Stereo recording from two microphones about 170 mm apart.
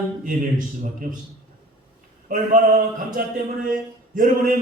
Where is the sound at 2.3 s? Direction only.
50° right (ahead or behind).